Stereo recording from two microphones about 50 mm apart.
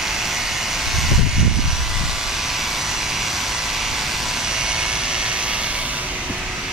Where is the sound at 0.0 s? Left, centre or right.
Centre; by 6.0 s right.